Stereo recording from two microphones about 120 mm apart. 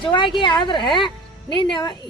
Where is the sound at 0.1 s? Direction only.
40° left (ahead or behind).